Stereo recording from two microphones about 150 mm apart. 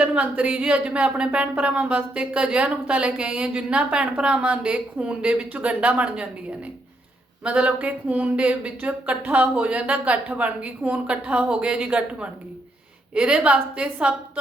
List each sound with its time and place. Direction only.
0.0 s speech: 10° right (ahead or behind)